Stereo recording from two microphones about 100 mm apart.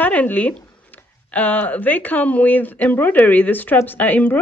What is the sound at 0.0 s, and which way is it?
Speech, 15° left (ahead or behind).